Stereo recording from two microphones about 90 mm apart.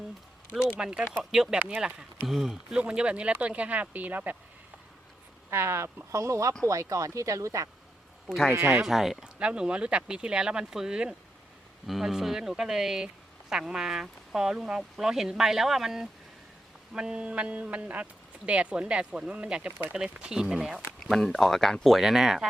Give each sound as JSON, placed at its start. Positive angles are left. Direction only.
{"t": 0.8, "sound": "a man's voice", "side_deg": -10}
{"t": 5.5, "sound": "speech", "side_deg": -30}
{"t": 8.5, "sound": "speech", "side_deg": -25}
{"t": 8.8, "sound": "a man's voice", "side_deg": -5}